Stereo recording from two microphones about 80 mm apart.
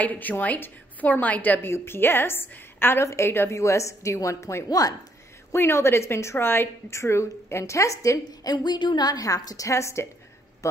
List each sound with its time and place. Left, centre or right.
0.0 s a woman's voice: centre; by 4.9 s left
5.5 s a woman's voice: left